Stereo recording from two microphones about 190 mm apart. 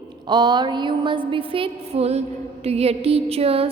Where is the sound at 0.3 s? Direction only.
25° right (ahead or behind).